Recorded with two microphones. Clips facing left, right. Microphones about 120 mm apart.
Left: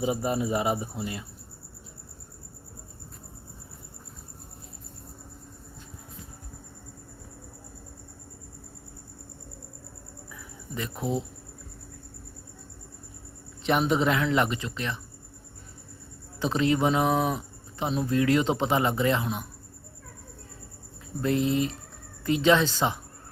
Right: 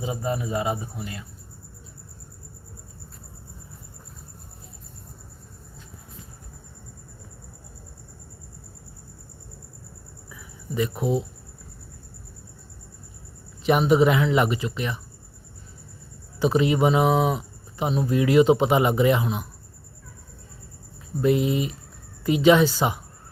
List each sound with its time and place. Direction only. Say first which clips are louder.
0.0 s speech: left 1 dB; 20° left (ahead or behind)
10.8 s speech: right 6 dB; 5° right (ahead or behind)
13.7 s speech: right 5 dB; 5° right (ahead or behind)
16.4 s speech: right 4 dB; 10° right (ahead or behind)
21.2 s speech: right 3 dB; 10° right (ahead or behind)